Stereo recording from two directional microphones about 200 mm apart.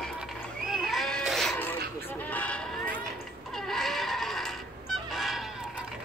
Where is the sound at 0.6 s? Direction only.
Centre (ahead or behind).